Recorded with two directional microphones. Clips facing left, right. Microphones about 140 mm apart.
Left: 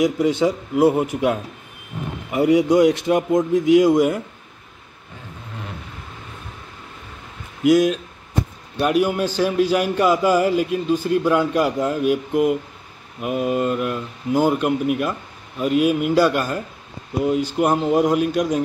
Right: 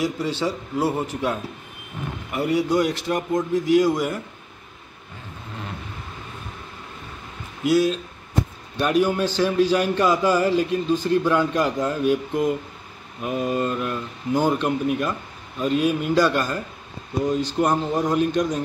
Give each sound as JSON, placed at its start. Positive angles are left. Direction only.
{"t": 0.0, "sound": "a man's voice", "side_deg": 15}
{"t": 7.6, "sound": "a man's voice", "side_deg": 15}